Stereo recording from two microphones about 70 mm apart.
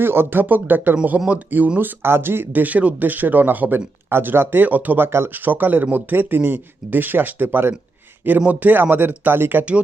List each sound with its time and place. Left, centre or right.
0.0 s speech: right
2.0 s speech: right